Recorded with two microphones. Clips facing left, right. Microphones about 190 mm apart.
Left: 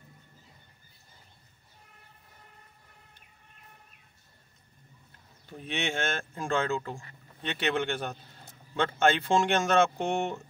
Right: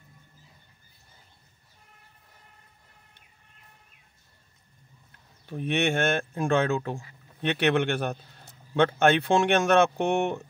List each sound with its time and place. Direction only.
5.5 s speech: 65° right (ahead or behind)